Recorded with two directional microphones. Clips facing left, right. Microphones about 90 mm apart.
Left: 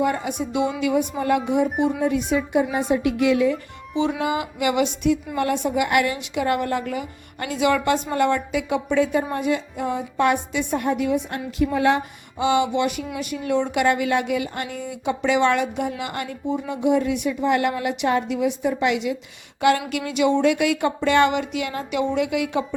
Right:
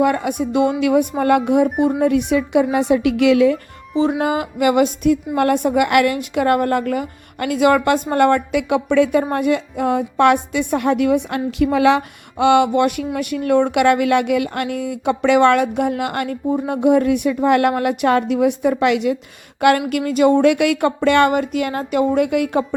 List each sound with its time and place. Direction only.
0.0 s a woman's voice: 60° right (ahead or behind)
4.2 s a woman's voice: 45° right (ahead or behind)
19.9 s speech: 45° right (ahead or behind)